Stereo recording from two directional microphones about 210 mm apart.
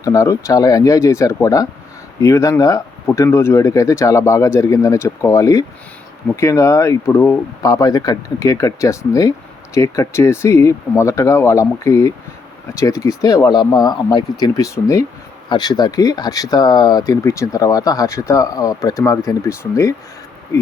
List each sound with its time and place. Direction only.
0.0 s speech: 15° left (ahead or behind)